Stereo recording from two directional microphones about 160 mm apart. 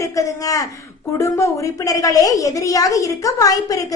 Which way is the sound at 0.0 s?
20° left (ahead or behind).